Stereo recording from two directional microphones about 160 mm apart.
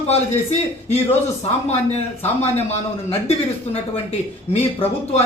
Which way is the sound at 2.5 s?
40° left (ahead or behind).